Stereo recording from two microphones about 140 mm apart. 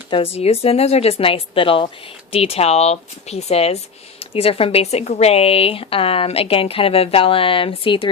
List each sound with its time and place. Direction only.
0.1 s speech: 45° left (ahead or behind)